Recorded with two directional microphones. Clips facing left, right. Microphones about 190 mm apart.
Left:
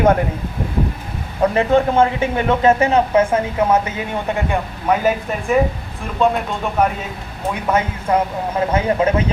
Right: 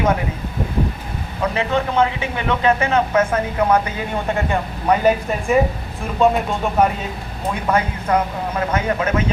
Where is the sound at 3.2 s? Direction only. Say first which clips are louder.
Left 2 dB; 30° left (ahead or behind).